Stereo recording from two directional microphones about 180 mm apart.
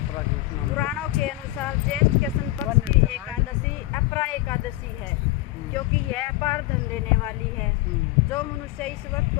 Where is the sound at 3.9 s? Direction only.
15° left (ahead or behind).